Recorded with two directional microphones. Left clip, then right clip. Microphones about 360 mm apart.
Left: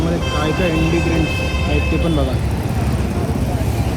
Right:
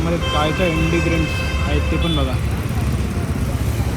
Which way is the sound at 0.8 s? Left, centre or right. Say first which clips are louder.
Left 1 dB; centre.